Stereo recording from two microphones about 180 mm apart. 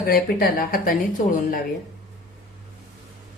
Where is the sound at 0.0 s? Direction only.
55° left (ahead or behind).